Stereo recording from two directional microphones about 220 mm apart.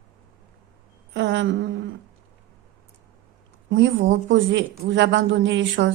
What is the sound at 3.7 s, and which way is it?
A woman's voice, 50° right (ahead or behind).